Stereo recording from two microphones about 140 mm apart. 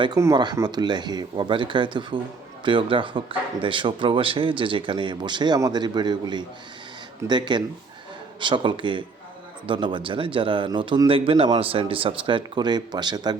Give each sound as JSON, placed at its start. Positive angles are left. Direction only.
{"t": 0.2, "sound": "speech", "side_deg": -25}